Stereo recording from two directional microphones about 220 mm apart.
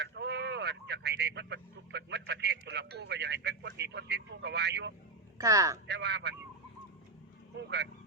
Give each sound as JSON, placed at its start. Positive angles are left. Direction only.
{"t": 0.0, "sound": "speech", "side_deg": -50}
{"t": 5.4, "sound": "speech", "side_deg": -15}
{"t": 5.9, "sound": "speech", "side_deg": -50}
{"t": 7.5, "sound": "speech", "side_deg": -50}